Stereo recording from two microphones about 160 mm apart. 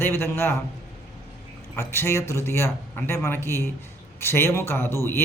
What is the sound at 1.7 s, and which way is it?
Speech, 15° left (ahead or behind).